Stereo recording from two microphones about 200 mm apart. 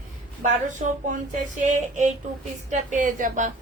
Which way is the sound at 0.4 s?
40° right (ahead or behind).